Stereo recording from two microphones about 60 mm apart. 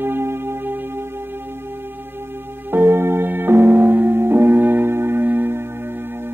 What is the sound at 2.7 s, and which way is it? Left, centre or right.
Music, right.